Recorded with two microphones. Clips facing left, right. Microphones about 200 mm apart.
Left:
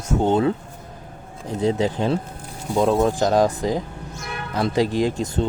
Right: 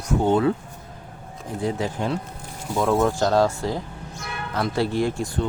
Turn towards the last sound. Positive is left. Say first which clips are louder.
# left 2 dB
turn(degrees=20)  # may be behind; listen again after turning